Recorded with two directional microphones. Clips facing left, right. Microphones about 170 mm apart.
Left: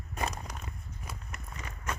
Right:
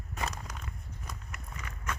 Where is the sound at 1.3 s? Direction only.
25° left (ahead or behind).